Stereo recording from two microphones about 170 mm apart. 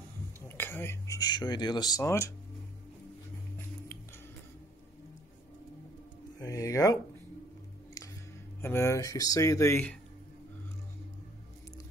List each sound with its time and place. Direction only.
0.5 s speech: 10° left (ahead or behind)
6.4 s speech: 20° left (ahead or behind)
8.5 s speech: 15° left (ahead or behind)